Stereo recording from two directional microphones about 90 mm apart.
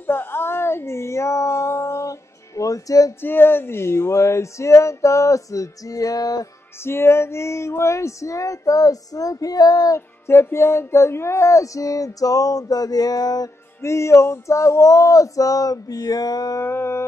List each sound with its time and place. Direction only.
0.0 s a sound: 25° left (ahead or behind); by 3.2 s 40° left (ahead or behind)
3.2 s music: 25° left (ahead or behind); by 6.4 s 40° left (ahead or behind)
6.8 s music: 30° left (ahead or behind); by 9.9 s 45° left (ahead or behind)
9.9 s music: 30° left (ahead or behind); by 13.5 s 45° left (ahead or behind)
13.7 s music: 30° left (ahead or behind)
16.6 s a sound: 30° left (ahead or behind)